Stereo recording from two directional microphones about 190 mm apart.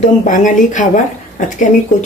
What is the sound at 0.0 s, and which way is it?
Speech, 40° left (ahead or behind).